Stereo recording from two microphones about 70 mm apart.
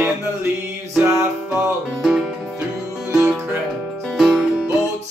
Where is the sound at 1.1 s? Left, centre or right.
Right.